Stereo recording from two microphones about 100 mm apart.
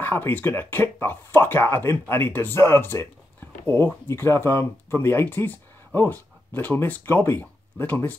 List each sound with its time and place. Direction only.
0.0 s speech: 20° left (ahead or behind)